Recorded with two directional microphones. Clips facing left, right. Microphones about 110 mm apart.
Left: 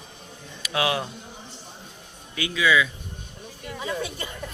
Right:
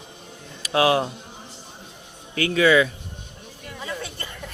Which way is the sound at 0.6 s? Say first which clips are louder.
Right 6 dB; 35° right (ahead or behind).